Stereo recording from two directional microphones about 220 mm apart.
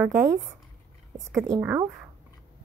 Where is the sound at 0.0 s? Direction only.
15° right (ahead or behind).